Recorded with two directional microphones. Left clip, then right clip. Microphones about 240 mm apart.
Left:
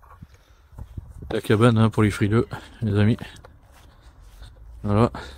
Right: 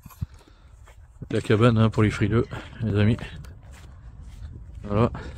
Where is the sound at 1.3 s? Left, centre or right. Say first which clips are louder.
Left 1 dB; centre.